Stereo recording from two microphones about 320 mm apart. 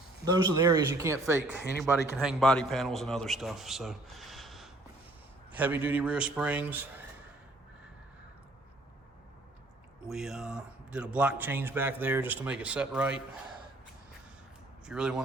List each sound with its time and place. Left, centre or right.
0.3 s a man's voice: centre
10.1 s a man's voice: centre
14.8 s a man's voice: centre